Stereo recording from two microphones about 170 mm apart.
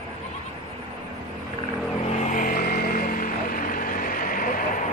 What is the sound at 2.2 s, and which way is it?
Vehicle, 45° left (ahead or behind).